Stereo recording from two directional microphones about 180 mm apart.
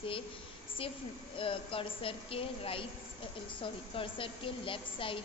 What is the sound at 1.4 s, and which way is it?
A woman's voice, 30° left (ahead or behind).